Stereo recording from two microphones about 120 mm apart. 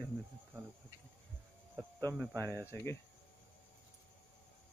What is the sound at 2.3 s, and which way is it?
Speech, 25° right (ahead or behind).